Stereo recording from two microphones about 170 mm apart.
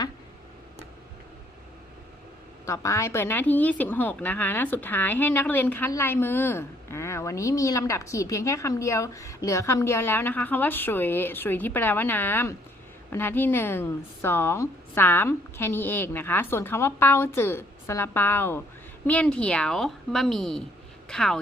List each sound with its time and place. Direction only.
2.6 s a woman's voice: 20° left (ahead or behind); by 21.3 s 5° left (ahead or behind)